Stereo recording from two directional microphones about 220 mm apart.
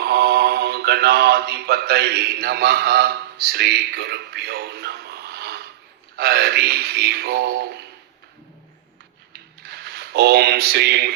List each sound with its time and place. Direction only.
0.0 s mantra: 45° right (ahead or behind)
6.1 s a man's voice: 45° right (ahead or behind)
9.3 s a sound: 45° right (ahead or behind)